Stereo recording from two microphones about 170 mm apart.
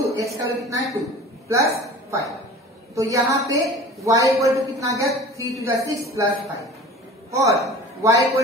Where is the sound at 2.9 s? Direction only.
20° right (ahead or behind).